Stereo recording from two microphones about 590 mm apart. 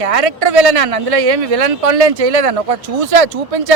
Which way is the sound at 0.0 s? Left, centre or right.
Right.